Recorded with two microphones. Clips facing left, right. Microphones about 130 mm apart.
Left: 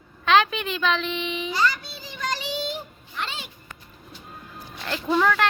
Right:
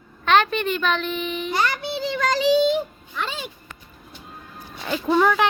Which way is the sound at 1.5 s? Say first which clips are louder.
Right 2 dB; 60° right (ahead or behind).